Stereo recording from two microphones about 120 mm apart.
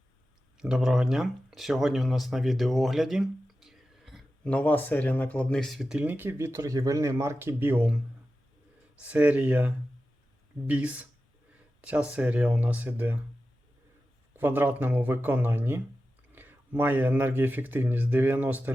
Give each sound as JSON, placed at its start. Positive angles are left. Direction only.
{"t": 0.5, "sound": "speech", "side_deg": -5}
{"t": 6.0, "sound": "speech", "side_deg": -15}
{"t": 14.3, "sound": "speech", "side_deg": -15}